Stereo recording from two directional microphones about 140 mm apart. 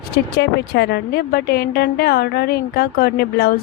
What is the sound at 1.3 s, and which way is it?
Speech, 90° left.